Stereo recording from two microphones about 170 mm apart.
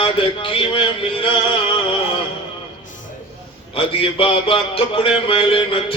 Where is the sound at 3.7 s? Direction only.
30° left (ahead or behind).